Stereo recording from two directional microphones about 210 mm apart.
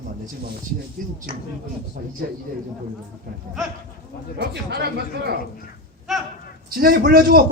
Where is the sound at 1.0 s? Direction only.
40° right (ahead or behind).